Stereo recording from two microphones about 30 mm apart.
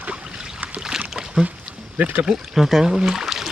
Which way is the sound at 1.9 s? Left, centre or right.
Right.